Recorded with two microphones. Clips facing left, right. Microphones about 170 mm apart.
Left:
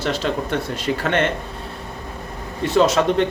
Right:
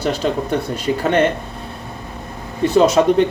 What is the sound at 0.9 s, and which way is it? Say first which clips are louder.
Speech: right 3 dB; 25° right (ahead or behind).